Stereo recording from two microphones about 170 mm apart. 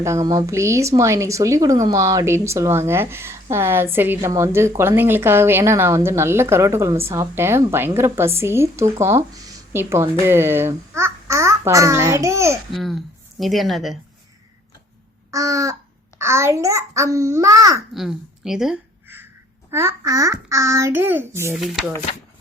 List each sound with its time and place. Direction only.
0.0 s speech: 20° right (ahead or behind)
12.7 s speech: centre (ahead or behind)
15.3 s a sound: 20° right (ahead or behind)
16.1 s speech: 15° right (ahead or behind)
17.9 s a sound: centre (ahead or behind)
19.7 s speech: 15° right (ahead or behind)
21.6 s speech: centre (ahead or behind)